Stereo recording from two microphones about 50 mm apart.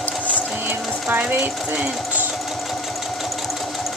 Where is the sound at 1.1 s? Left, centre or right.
Right.